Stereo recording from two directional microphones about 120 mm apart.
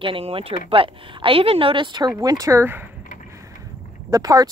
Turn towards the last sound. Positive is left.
turn(degrees=-30)  # may be behind; listen again after turning